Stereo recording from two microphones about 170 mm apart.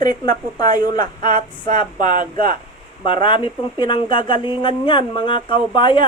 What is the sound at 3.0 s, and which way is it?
Speech, 30° left (ahead or behind).